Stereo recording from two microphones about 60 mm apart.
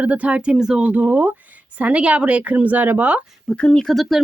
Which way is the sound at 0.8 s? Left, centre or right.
Right.